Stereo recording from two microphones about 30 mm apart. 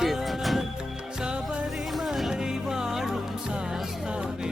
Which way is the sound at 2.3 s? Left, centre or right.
Right.